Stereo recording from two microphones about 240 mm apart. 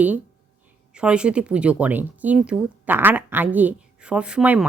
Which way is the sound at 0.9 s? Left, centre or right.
Centre.